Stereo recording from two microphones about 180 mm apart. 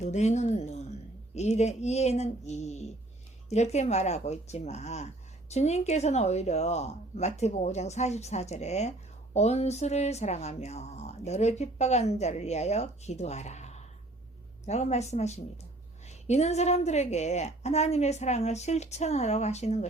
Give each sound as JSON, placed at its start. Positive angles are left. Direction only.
{"t": 0.0, "sound": "speech", "side_deg": 40}